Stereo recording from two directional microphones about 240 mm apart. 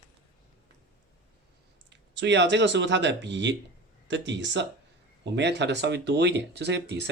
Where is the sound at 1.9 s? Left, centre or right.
Right.